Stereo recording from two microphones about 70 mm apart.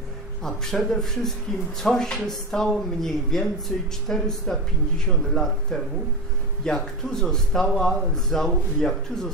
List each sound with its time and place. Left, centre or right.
0.4 s a man's voice: centre